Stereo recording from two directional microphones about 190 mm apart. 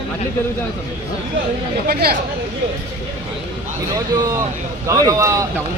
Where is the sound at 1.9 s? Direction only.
55° right (ahead or behind).